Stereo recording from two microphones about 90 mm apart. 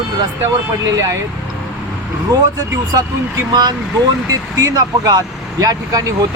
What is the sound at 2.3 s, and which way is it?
Speech, 50° right (ahead or behind).